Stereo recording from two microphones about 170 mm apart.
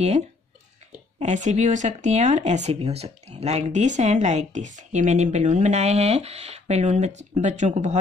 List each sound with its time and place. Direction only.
1.2 s speech: 45° right (ahead or behind)